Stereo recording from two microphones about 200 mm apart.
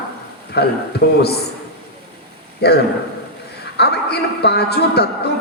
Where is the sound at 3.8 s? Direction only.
55° left (ahead or behind).